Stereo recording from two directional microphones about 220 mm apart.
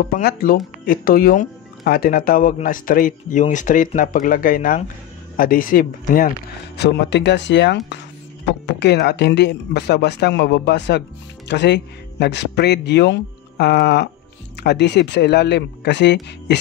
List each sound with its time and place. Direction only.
0.1 s speech: 45° left (ahead or behind)
6.8 s speech: 50° left (ahead or behind)